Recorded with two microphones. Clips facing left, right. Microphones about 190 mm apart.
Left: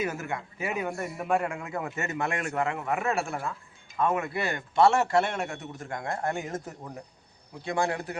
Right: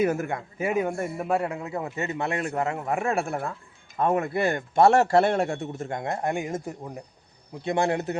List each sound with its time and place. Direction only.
0.0 s speech: 50° right (ahead or behind)
0.9 s a man's voice: 30° right (ahead or behind)
3.1 s speech: 55° right (ahead or behind)
3.9 s a man's voice: 40° right (ahead or behind)